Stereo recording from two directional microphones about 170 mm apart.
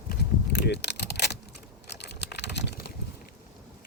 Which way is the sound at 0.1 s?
80° left.